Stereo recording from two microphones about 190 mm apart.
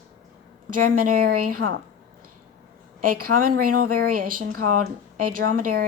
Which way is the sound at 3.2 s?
45° right (ahead or behind).